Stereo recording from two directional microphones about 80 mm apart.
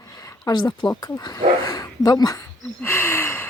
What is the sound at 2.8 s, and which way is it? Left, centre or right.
Gasp, left.